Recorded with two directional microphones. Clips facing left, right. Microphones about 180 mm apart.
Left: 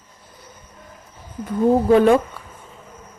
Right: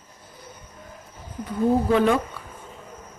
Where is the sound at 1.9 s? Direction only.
45° left (ahead or behind).